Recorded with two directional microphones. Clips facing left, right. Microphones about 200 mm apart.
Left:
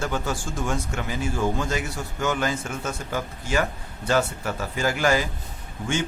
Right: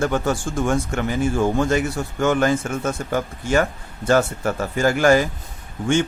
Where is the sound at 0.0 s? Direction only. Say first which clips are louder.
Right 7 dB; 55° right (ahead or behind).